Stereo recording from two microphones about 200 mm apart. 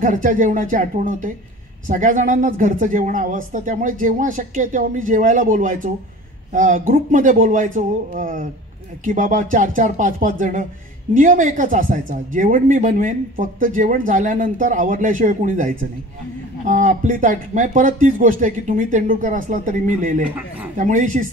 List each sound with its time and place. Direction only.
0.0 s speech: 40° right (ahead or behind)